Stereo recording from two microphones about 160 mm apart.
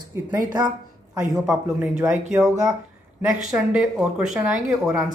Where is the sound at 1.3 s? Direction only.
5° right (ahead or behind).